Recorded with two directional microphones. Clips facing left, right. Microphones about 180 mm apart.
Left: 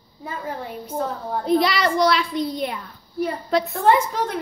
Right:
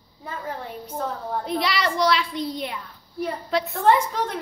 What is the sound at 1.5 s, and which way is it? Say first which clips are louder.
A child's voice: left 7 dB; 45° left (ahead or behind).